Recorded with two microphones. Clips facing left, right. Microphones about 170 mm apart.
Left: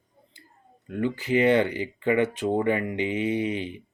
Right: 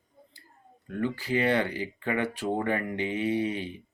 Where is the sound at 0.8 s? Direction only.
20° left (ahead or behind).